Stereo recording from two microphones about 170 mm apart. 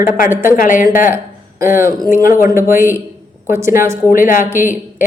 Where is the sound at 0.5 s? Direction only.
50° left (ahead or behind).